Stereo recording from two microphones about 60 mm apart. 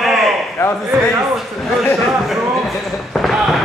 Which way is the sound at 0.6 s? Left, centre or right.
Left.